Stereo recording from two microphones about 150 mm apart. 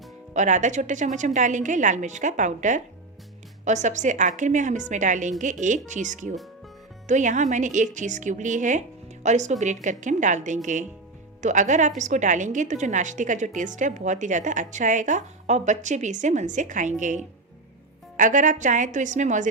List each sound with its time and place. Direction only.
0.3 s a woman's voice: 55° right (ahead or behind)